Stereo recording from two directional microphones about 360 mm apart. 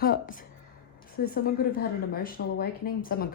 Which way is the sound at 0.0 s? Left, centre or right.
Left.